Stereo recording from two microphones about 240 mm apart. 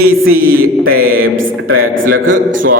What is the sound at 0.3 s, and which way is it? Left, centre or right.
Speech, right.